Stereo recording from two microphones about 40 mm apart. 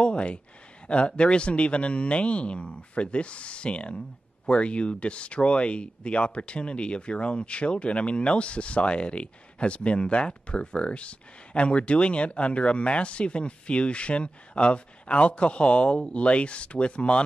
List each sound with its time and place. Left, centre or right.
0.0 s speech: left